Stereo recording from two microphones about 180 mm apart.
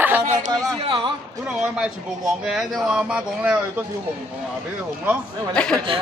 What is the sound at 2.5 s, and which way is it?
Speech, 5° right (ahead or behind).